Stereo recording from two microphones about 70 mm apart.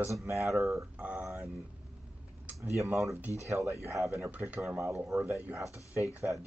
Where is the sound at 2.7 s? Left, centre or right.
Right.